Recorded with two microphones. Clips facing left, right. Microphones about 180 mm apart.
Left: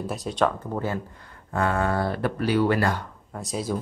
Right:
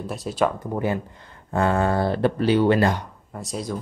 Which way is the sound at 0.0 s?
Centre (ahead or behind).